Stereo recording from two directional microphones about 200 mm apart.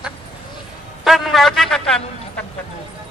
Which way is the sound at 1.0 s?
Centre (ahead or behind).